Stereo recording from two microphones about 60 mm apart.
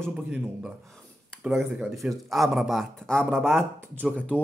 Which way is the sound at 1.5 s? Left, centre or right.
Centre.